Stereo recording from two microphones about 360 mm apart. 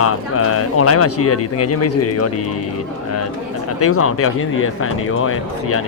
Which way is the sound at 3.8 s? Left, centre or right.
Left.